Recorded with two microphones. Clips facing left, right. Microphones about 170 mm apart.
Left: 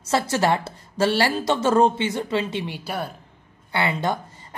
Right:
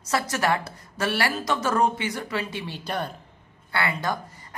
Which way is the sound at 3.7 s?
20° left (ahead or behind).